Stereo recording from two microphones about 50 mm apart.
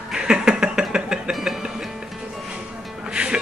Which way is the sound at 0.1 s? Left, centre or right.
Centre.